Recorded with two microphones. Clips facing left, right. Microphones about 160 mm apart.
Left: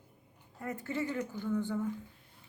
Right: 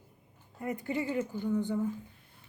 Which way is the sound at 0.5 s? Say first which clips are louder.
Right 3 dB; 15° right (ahead or behind).